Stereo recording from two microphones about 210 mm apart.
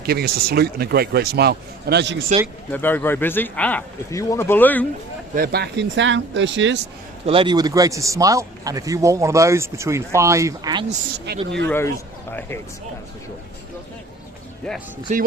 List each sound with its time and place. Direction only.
0.0 s a man's voice: 45° right (ahead or behind)
2.7 s speech: 10° left (ahead or behind)
5.3 s speech: 45° right (ahead or behind)
7.3 s a man's voice: 25° right (ahead or behind)
11.3 s a man's voice: 50° right (ahead or behind)
11.6 s speech: 10° left (ahead or behind)
15.1 s speech: 35° right (ahead or behind)